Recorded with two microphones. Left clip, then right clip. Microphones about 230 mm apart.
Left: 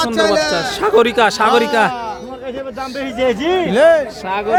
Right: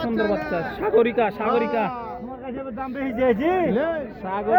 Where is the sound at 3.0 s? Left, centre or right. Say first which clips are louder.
Left 4 dB; right.